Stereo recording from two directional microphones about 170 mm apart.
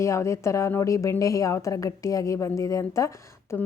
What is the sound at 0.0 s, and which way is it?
A woman's voice, 15° left (ahead or behind).